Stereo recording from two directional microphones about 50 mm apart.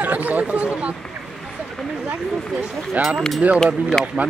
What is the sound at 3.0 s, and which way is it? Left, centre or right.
Speech, right.